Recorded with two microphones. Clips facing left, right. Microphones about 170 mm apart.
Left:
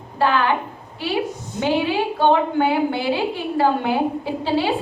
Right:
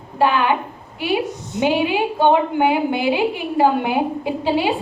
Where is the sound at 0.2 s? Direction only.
15° right (ahead or behind).